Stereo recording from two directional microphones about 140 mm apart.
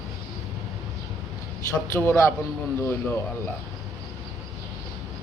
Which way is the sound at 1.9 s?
15° left (ahead or behind).